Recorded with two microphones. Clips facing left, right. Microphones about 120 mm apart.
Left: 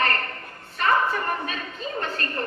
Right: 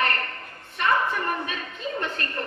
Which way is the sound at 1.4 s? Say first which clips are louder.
Left 1 dB; 35° left (ahead or behind).